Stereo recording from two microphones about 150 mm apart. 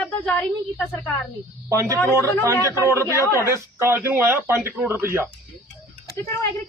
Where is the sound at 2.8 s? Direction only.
15° right (ahead or behind).